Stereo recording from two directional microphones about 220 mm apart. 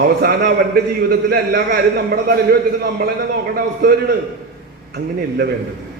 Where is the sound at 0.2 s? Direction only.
45° right (ahead or behind).